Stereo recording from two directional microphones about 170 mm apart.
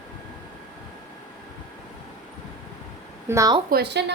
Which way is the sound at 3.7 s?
80° right.